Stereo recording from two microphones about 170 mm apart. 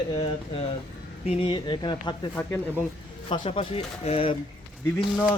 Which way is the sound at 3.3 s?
30° left (ahead or behind).